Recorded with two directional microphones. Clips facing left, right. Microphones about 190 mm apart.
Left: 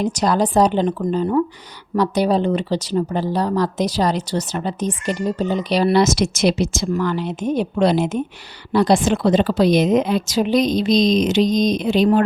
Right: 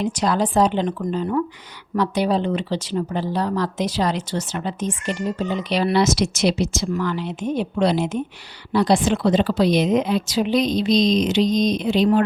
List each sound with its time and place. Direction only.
0.0 s a woman's voice: 40° left (ahead or behind)